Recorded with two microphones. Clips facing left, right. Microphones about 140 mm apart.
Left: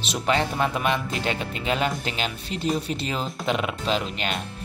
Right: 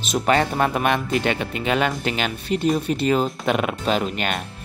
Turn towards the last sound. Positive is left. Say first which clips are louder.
# right 4 dB
turn(degrees=-55)  # may be behind; listen again after turning